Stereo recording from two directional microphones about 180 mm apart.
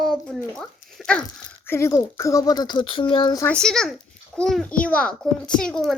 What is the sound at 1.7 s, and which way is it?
Speech, 15° left (ahead or behind).